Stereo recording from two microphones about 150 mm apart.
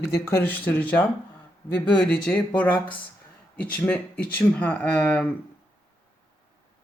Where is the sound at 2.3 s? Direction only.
10° left (ahead or behind).